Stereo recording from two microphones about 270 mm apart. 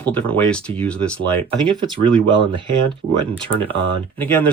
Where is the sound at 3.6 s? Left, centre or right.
Centre.